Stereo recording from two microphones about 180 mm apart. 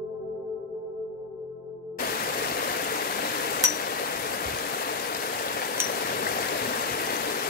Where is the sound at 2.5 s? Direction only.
60° left (ahead or behind).